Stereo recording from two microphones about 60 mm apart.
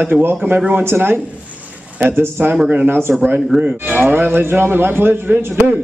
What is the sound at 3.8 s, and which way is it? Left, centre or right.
Speech, right.